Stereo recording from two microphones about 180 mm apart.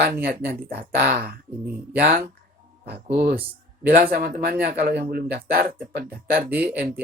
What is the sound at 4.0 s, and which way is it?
Speech, 50° right (ahead or behind).